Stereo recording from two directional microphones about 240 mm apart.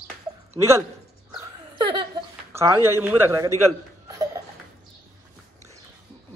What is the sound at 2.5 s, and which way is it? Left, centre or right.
Speech, centre.